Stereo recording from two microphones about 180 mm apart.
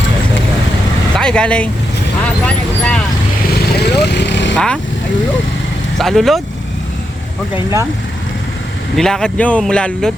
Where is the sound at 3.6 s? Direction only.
65° left (ahead or behind).